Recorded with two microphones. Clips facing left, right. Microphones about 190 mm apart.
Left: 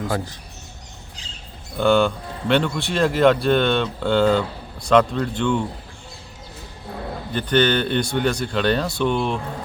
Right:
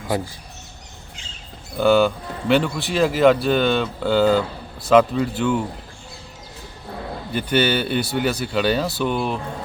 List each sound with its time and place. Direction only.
1.7 s speech: 5° right (ahead or behind)
7.3 s speech: 10° right (ahead or behind)